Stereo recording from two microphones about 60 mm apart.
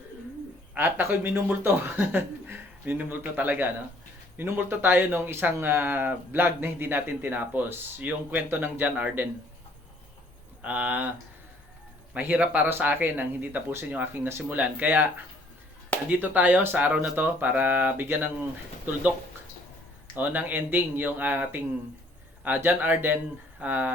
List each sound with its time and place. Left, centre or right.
0.8 s speech: right
10.6 s speech: right
12.1 s speech: right
12.6 s speech: right
14.5 s speech: right
16.1 s speech: right
20.1 s speech: right